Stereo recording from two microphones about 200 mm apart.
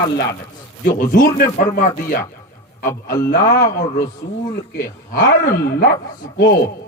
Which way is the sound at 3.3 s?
45° left (ahead or behind).